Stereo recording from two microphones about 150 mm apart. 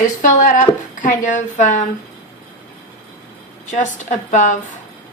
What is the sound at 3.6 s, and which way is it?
Speech, 55° left (ahead or behind).